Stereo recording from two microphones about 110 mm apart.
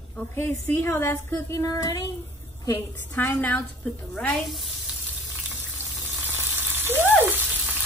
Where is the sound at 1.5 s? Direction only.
35° left (ahead or behind).